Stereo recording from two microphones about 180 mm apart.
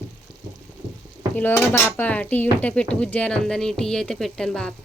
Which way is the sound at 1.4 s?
10° left (ahead or behind).